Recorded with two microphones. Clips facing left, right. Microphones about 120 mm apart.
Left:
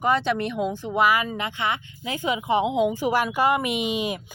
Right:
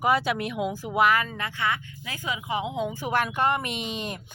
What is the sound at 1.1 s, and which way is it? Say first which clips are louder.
Speech: left 2 dB; 10° left (ahead or behind).